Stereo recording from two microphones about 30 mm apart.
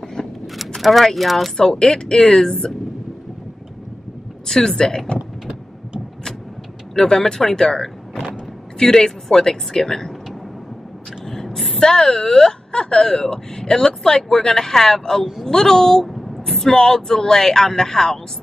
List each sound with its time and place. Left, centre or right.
0.0 s vehicle: centre
0.8 s speech: centre
1.6 s speech: centre
4.5 s speech: centre
7.1 s speech: centre
11.2 s a sound: centre
11.8 s speech: left
14.5 s speech: centre
16.1 s a sound: centre
16.7 s speech: centre